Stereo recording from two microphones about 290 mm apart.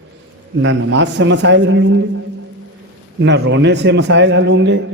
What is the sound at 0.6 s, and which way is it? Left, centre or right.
A man's voice, right.